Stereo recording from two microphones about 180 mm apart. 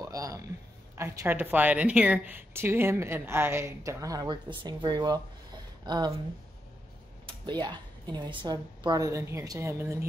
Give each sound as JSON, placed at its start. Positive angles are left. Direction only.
{"t": 0.0, "sound": "a woman's voice", "side_deg": -20}
{"t": 7.2, "sound": "a woman's voice", "side_deg": -25}